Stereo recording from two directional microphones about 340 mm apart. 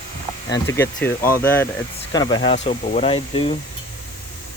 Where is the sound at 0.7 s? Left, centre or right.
Centre.